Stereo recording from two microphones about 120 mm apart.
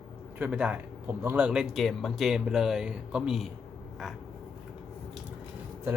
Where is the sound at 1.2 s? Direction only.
20° right (ahead or behind).